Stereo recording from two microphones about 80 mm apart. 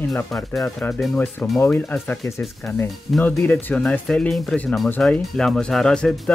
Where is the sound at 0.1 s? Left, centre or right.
Centre.